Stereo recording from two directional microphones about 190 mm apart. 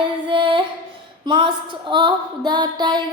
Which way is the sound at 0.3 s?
25° right (ahead or behind).